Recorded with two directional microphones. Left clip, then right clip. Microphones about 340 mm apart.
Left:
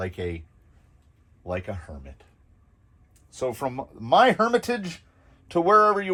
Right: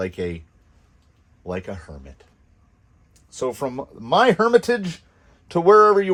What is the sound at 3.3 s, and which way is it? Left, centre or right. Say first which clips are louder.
Speech: right 3 dB; right.